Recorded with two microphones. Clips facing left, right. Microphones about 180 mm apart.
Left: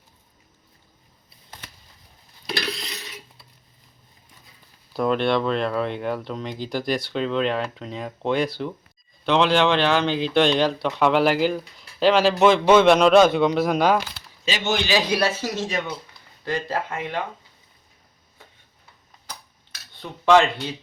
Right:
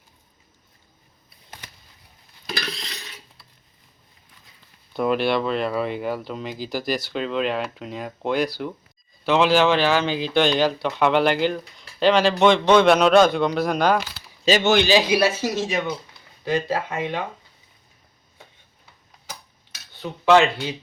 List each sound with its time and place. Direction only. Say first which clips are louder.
4.9 s speech: even; 5° right (ahead or behind)
14.6 s a man's voice: right 4 dB; 70° right (ahead or behind)
15.1 s speech: right 3 dB; 10° right (ahead or behind)
20.0 s speech: right 1 dB; 5° right (ahead or behind)